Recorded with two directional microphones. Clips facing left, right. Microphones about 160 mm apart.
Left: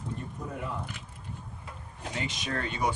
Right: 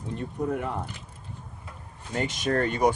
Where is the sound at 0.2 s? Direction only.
65° right (ahead or behind).